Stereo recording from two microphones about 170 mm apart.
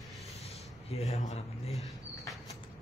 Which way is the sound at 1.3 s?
40° left (ahead or behind).